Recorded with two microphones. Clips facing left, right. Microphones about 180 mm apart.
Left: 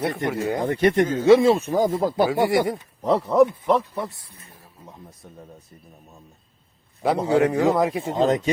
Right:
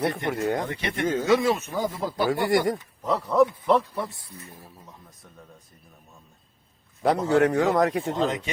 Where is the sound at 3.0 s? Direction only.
25° left (ahead or behind).